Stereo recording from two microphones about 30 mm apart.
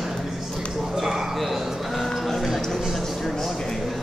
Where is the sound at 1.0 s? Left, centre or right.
Centre.